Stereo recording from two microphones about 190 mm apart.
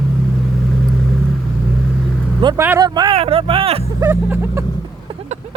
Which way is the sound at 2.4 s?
15° right (ahead or behind).